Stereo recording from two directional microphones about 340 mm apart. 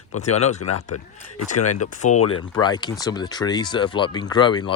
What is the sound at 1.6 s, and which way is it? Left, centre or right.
Speech, left.